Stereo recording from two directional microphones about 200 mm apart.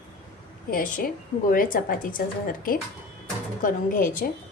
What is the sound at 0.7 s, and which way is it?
A woman's voice, 45° left (ahead or behind).